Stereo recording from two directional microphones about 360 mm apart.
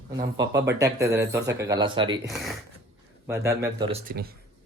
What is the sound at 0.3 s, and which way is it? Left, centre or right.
Speech, centre.